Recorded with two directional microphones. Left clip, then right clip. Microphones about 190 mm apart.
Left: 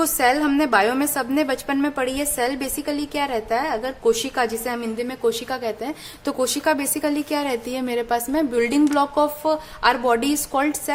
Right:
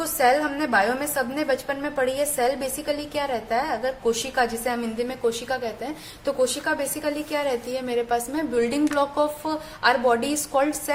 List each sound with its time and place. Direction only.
0.0 s a woman's voice: 40° left (ahead or behind)